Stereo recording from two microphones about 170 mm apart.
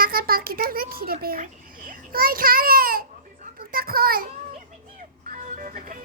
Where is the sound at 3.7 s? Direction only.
60° right (ahead or behind).